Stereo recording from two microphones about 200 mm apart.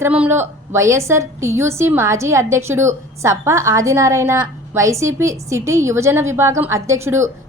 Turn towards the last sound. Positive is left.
turn(degrees=-15)  # may be behind; listen again after turning